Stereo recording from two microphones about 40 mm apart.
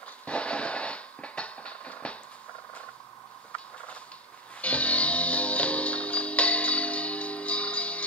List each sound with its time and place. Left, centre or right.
0.3 s music: left
3.5 s a sound: left
4.6 s music: left